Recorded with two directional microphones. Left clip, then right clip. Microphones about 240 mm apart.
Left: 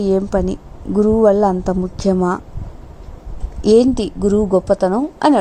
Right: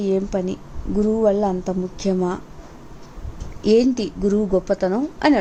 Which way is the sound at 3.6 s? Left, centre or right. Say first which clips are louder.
Left 5 dB; centre.